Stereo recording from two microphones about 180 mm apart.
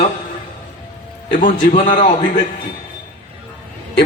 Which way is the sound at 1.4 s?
45° left (ahead or behind).